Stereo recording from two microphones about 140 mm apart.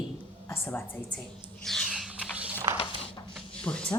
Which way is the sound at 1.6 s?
Centre (ahead or behind).